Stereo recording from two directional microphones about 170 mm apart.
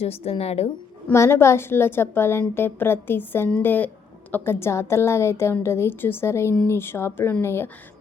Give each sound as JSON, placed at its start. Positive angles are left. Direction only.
{"t": 0.0, "sound": "a woman's voice", "side_deg": 35}
{"t": 1.0, "sound": "a woman's voice", "side_deg": 15}